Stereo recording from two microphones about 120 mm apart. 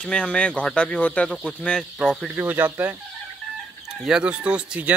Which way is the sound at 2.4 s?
15° right (ahead or behind).